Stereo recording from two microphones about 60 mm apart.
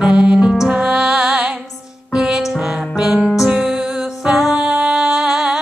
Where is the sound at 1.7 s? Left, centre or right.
Centre.